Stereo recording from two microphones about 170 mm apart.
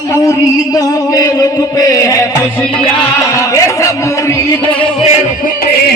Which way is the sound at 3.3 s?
20° left (ahead or behind).